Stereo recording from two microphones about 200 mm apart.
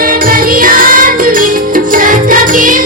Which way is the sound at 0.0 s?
45° right (ahead or behind).